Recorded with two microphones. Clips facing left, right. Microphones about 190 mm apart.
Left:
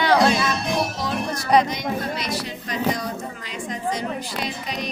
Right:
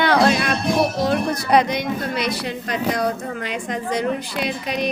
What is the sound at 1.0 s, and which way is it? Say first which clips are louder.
Music: right 6 dB; 60° right (ahead or behind).